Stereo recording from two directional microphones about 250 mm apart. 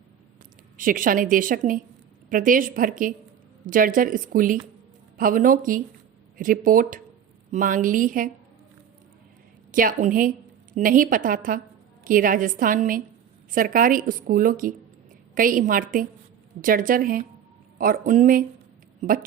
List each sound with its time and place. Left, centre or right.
0.8 s a woman's voice: right
9.7 s a woman's voice: right